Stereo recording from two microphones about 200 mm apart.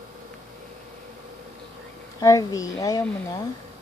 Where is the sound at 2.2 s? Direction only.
15° left (ahead or behind).